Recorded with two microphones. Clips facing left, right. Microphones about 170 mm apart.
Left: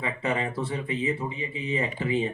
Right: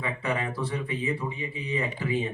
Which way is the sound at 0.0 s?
25° left (ahead or behind).